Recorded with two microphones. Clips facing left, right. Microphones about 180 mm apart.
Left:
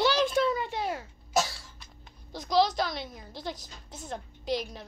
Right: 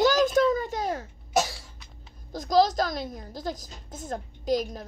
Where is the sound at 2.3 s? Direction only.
45° right (ahead or behind).